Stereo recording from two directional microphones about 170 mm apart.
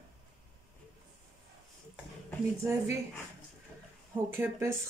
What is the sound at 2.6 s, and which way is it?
Speech, 15° right (ahead or behind).